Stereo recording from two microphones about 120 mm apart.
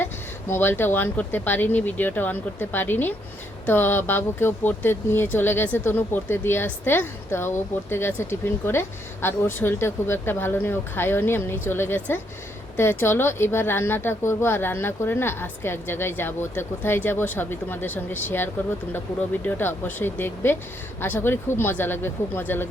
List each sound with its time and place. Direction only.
0.0 s speech: 20° left (ahead or behind)